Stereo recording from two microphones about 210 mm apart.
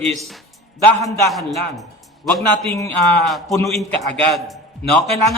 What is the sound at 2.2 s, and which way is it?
A man's voice, 10° left (ahead or behind).